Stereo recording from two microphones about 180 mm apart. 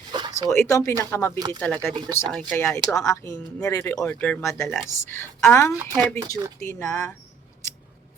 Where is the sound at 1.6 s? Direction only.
10° left (ahead or behind).